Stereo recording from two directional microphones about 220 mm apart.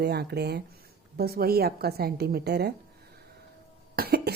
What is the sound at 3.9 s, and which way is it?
Cough, 45° right (ahead or behind).